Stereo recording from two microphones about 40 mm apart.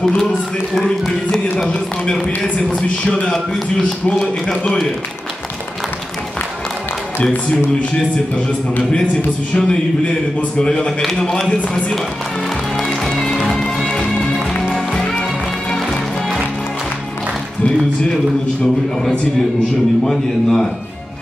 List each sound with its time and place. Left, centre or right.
0.7 s a man's voice: centre
3.1 s music: left
9.6 s music: left
13.2 s music: centre
13.9 s music: left
20.1 s a man's voice: centre